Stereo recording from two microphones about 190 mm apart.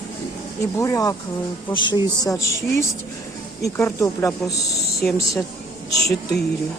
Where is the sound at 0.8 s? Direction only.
15° left (ahead or behind).